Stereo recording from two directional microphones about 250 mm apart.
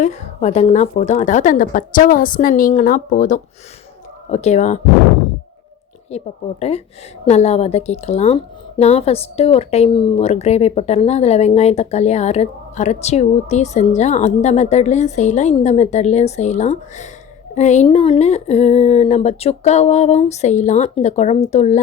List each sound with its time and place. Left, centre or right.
0.0 s a woman's voice: left
6.1 s speech: left